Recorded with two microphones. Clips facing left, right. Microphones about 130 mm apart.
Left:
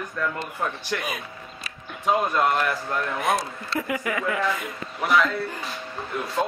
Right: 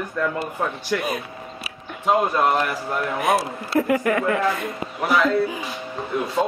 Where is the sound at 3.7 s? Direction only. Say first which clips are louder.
Right 8 dB; 50° right (ahead or behind).